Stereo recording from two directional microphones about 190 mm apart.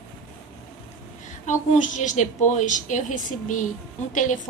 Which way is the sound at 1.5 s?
40° left (ahead or behind).